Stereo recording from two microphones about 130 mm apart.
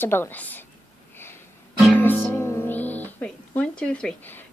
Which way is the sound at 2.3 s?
20° left (ahead or behind).